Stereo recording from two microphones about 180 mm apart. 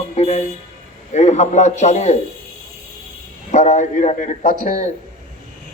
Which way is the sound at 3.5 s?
40° left (ahead or behind).